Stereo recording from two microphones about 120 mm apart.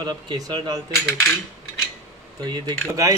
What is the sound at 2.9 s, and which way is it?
Speech, 25° right (ahead or behind).